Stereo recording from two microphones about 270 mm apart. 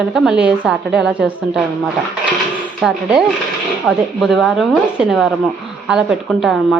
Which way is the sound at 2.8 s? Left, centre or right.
Centre.